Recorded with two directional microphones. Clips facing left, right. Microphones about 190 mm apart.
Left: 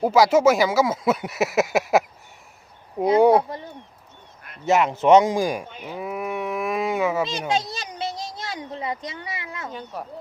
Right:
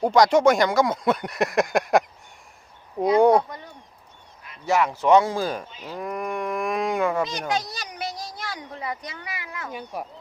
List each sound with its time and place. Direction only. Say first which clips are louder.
0.0 s speech: left 1 dB; 5° left (ahead or behind)
3.2 s speech: left 1 dB; 5° left (ahead or behind)
4.6 s speech: left 3 dB; 20° left (ahead or behind)
5.6 s speech: left 3 dB; 60° left (ahead or behind)
5.9 s cattle: left 1 dB; 5° left (ahead or behind)
7.3 s a child's voice: left 2 dB; 25° left (ahead or behind)
9.7 s speech: right 4 dB; 10° right (ahead or behind)